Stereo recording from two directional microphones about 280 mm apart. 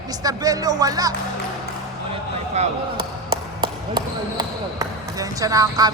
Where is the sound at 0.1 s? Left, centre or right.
Centre.